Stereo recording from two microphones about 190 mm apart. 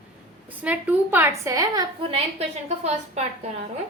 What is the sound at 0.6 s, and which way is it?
A woman's voice, 10° right (ahead or behind).